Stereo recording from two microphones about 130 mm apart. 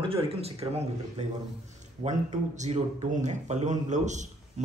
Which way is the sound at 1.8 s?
65° right (ahead or behind).